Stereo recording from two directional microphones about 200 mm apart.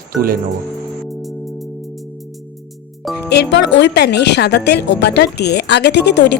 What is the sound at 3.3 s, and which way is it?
A woman's voice, 60° left (ahead or behind).